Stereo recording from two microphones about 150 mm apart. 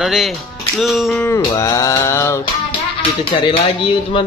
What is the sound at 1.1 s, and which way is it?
Music, 20° left (ahead or behind).